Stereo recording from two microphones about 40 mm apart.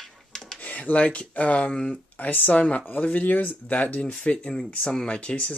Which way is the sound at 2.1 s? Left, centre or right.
Left.